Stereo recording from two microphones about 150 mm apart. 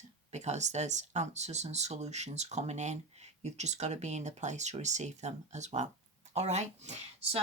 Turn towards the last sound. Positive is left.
turn(degrees=-50)  # may be behind; listen again after turning